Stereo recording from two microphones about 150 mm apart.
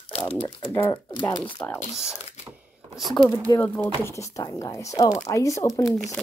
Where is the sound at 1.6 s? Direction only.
10° left (ahead or behind).